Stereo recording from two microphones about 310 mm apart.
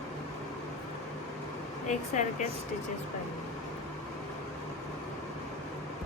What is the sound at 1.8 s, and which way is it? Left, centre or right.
Speech, left.